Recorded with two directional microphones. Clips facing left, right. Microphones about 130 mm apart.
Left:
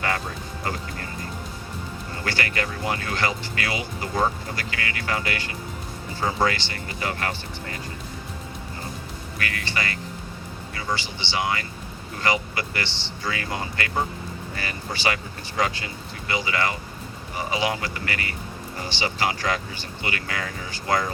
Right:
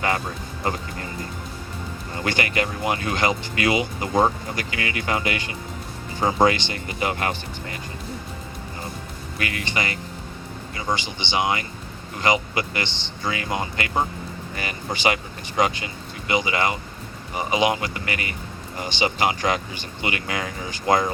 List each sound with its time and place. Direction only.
0.7 s speech: 20° right (ahead or behind)
2.2 s speech: 20° right (ahead or behind)
9.4 s speech: 20° right (ahead or behind)